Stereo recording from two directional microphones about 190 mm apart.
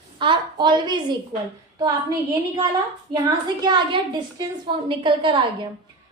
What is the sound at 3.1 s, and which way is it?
A woman's voice, 20° right (ahead or behind).